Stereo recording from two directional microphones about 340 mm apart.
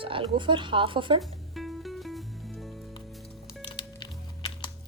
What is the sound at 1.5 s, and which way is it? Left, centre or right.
Music, centre.